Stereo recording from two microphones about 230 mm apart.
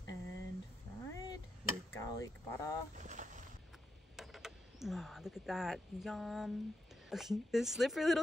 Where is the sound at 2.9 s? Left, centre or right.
Right.